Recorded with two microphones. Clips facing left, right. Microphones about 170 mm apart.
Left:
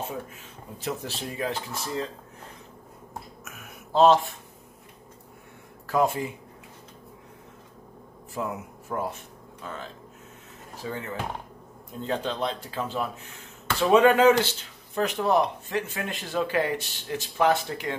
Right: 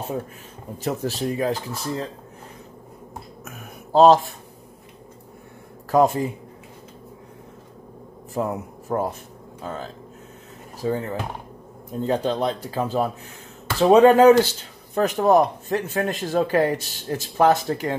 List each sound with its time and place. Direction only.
0.8 s speech: 40° right (ahead or behind)
3.4 s a sound: 35° right (ahead or behind)
5.9 s speech: 40° right (ahead or behind)
8.4 s speech: 40° right (ahead or behind)